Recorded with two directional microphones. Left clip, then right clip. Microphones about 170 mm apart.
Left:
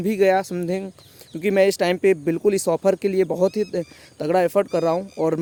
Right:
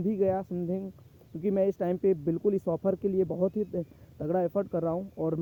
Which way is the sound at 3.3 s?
30° left (ahead or behind).